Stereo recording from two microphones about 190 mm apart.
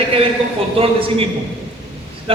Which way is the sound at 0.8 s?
30° right (ahead or behind).